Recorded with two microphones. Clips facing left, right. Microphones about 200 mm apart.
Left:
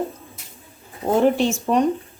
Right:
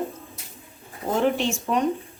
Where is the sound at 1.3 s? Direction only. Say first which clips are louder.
Left 5 dB; 40° left (ahead or behind).